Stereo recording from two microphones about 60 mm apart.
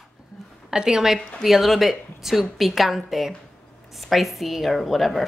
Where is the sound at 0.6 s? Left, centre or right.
Centre.